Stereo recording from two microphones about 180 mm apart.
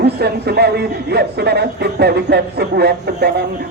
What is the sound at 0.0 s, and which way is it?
Speech, 65° right (ahead or behind).